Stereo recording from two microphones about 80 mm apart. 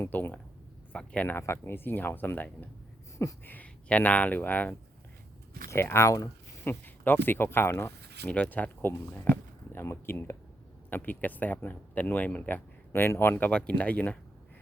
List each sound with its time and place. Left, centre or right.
0.0 s speech: left
1.4 s speech: left
5.7 s speech: left
8.3 s speech: centre; by 10.3 s left
10.8 s speech: left
13.5 s speech: centre